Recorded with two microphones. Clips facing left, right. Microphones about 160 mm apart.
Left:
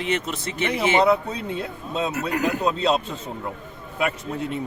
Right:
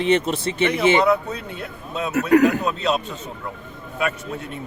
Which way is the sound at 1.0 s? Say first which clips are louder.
Even; 30° left (ahead or behind).